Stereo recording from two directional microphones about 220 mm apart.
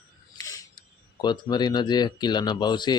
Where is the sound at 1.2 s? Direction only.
20° left (ahead or behind).